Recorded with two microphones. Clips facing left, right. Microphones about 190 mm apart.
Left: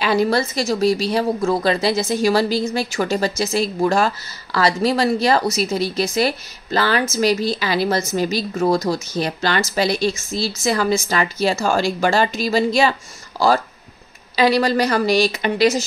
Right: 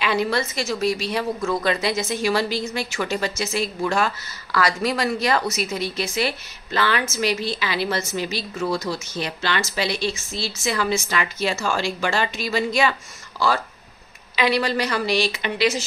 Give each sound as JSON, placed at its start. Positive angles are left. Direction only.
{"t": 0.0, "sound": "speech", "side_deg": 40}
{"t": 14.3, "sound": "speech", "side_deg": 40}